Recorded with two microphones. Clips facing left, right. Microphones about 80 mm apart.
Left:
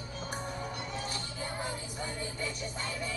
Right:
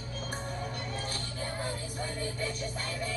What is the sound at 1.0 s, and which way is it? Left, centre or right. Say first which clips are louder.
Music: right 1 dB; left.